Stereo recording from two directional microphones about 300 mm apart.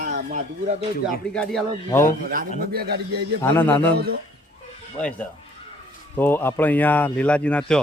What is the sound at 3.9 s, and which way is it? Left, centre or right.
Speech, right.